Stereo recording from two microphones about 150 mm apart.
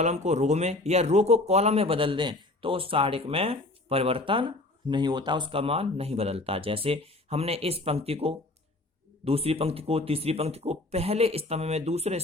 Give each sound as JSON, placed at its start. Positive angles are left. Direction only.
{"t": 0.0, "sound": "speech", "side_deg": -50}